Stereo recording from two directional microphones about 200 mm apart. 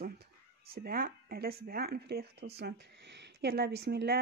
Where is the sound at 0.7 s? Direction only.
45° right (ahead or behind).